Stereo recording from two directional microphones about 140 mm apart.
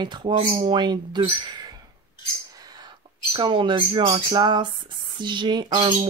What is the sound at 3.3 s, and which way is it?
Speech, 35° right (ahead or behind).